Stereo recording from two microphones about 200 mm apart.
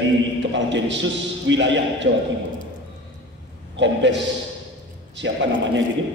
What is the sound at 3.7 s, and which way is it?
A man's voice, 65° right (ahead or behind).